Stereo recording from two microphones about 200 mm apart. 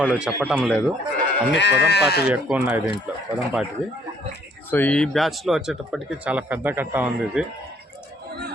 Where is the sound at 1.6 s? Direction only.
60° left (ahead or behind).